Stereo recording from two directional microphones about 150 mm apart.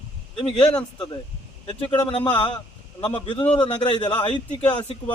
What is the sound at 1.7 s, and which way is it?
Speech, 35° left (ahead or behind).